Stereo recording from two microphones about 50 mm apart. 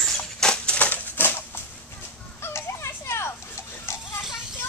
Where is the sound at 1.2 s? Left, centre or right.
Left.